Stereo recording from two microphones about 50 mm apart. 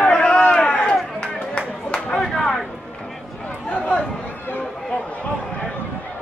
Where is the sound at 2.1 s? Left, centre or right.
Centre.